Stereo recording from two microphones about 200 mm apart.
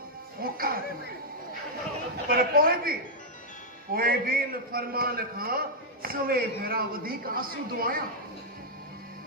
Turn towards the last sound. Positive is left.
turn(degrees=-45)  # may be behind; listen again after turning